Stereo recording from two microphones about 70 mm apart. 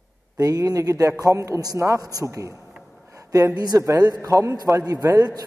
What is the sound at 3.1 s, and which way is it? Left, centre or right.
Speech, right.